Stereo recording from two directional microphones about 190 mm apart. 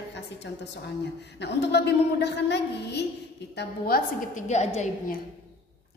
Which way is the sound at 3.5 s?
50° left (ahead or behind).